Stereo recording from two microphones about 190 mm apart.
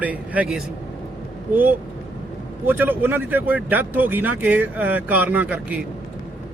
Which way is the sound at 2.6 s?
10° right (ahead or behind).